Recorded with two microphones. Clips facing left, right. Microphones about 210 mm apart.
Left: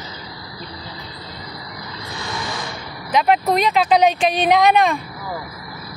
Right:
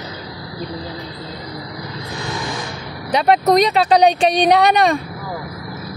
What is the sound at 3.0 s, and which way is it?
Speech, 35° right (ahead or behind).